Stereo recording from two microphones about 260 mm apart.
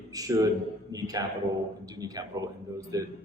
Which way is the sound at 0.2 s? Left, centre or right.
Centre.